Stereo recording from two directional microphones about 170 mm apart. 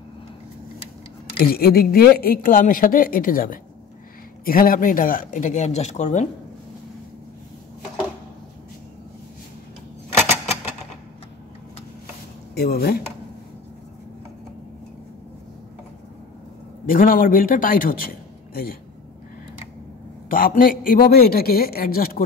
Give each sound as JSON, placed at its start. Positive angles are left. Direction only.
{"t": 1.4, "sound": "a woman's voice", "side_deg": 65}
{"t": 12.5, "sound": "a woman's voice", "side_deg": 65}
{"t": 16.8, "sound": "a man's voice", "side_deg": 55}
{"t": 20.2, "sound": "a woman's voice", "side_deg": 55}